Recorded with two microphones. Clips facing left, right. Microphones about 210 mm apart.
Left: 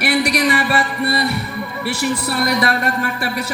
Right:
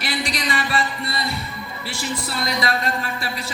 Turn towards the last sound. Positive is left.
turn(degrees=65)  # may be behind; listen again after turning